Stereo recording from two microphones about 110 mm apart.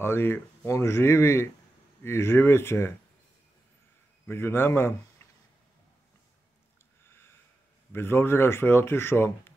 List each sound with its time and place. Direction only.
0.0 s speech: 20° left (ahead or behind)
4.3 s speech: 20° left (ahead or behind)
7.9 s speech: 20° left (ahead or behind)